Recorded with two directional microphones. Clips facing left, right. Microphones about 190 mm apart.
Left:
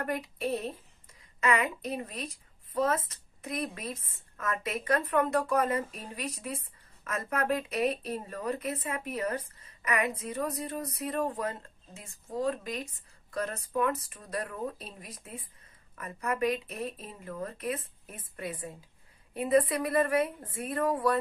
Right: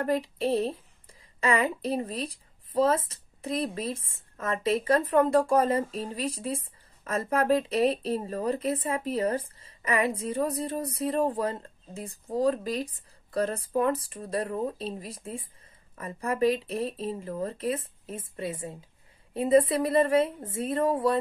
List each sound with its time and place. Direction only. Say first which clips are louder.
0.0 s speech: right 6 dB; 30° right (ahead or behind)